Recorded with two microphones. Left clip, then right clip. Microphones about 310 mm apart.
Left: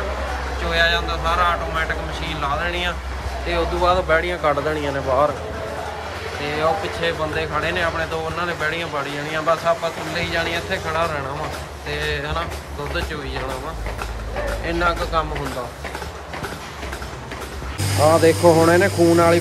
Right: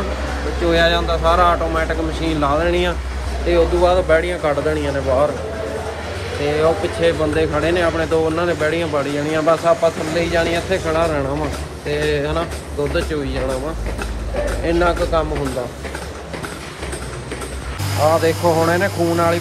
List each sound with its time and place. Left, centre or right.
0.7 s speech: centre
6.4 s speech: centre
14.6 s speech: centre
18.0 s speech: centre